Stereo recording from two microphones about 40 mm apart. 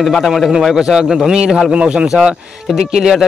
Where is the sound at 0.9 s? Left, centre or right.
Centre.